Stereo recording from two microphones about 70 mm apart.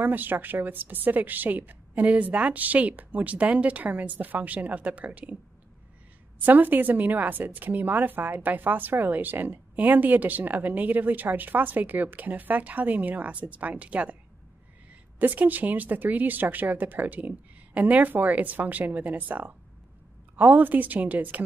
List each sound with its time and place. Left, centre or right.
0.0 s a woman's voice: right
6.4 s a woman's voice: right
15.1 s a woman's voice: right